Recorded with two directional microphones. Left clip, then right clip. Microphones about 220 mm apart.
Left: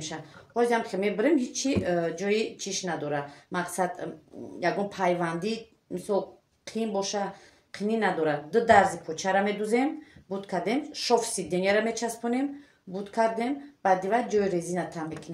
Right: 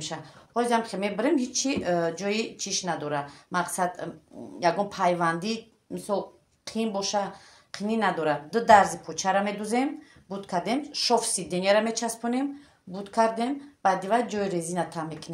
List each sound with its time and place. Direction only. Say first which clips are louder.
0.6 s a woman's voice: even; 35° right (ahead or behind)